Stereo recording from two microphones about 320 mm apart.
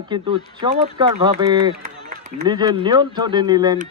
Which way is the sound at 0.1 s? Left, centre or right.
Centre.